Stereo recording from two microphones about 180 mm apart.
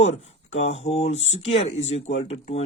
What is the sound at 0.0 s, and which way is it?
Speech, 35° left (ahead or behind).